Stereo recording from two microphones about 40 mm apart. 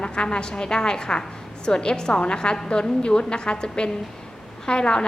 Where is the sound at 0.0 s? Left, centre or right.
Left.